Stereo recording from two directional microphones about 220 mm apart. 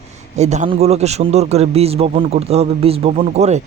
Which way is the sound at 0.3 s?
30° right (ahead or behind).